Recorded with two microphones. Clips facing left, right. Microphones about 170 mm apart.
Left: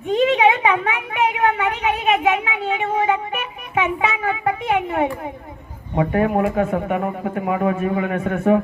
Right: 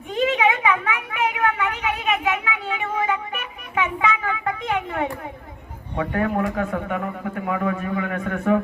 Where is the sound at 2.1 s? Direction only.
25° left (ahead or behind).